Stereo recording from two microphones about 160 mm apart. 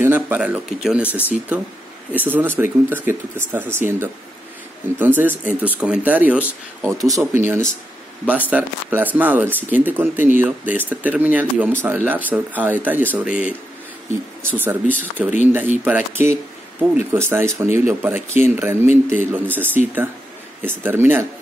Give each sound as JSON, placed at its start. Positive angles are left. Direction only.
{"t": 0.0, "sound": "speech", "side_deg": -10}
{"t": 1.0, "sound": "speech", "side_deg": 15}
{"t": 1.5, "sound": "speech", "side_deg": -10}
{"t": 6.9, "sound": "speech", "side_deg": -20}